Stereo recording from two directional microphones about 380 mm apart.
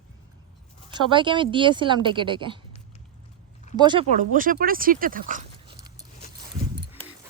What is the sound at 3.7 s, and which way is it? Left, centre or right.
Speech, centre.